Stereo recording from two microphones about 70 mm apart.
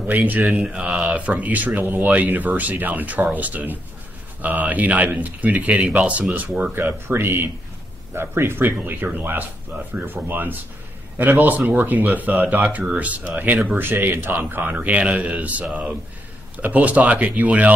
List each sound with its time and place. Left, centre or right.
0.0 s speech: right
5.8 s speech: centre
6.6 s speech: right
13.7 s speech: right